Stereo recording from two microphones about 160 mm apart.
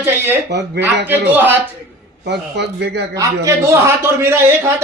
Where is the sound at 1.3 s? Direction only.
10° right (ahead or behind).